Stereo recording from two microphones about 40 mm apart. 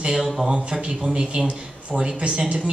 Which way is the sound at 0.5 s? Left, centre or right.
Centre.